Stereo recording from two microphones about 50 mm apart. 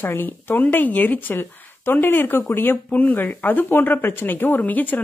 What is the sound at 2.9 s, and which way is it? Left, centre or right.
Speech, left.